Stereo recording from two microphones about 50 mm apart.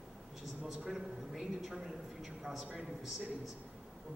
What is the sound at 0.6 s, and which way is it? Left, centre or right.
A woman's voice, centre.